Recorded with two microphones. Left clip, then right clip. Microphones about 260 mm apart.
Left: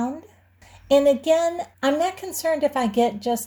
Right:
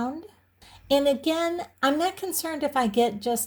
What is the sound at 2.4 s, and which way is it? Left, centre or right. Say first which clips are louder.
Speech: left 7 dB; right.